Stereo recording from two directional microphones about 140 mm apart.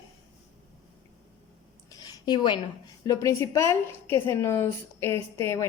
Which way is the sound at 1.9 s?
30° left (ahead or behind).